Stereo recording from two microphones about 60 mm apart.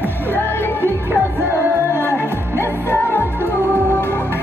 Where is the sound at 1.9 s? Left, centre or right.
Left.